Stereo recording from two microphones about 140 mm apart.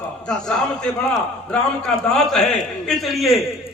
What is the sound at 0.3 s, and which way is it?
A man's voice, 5° left (ahead or behind).